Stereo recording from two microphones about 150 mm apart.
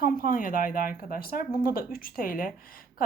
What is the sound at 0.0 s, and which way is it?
Speech, 70° left (ahead or behind).